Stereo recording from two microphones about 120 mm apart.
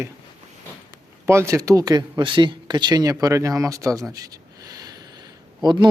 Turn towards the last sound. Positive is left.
turn(degrees=-35)  # may be behind; listen again after turning